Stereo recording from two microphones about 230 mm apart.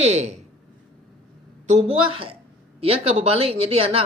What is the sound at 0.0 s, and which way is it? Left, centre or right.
Speech, right.